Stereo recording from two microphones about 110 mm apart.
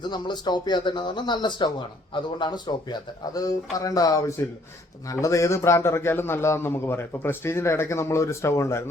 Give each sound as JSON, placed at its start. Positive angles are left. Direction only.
{"t": 0.0, "sound": "a man's voice", "side_deg": 40}